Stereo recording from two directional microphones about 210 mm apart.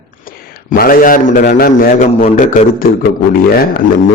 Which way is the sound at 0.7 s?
45° left (ahead or behind).